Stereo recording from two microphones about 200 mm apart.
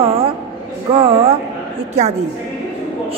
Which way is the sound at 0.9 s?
30° right (ahead or behind).